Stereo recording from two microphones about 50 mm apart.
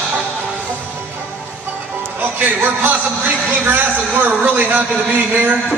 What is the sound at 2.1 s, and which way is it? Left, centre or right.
A man's voice, right.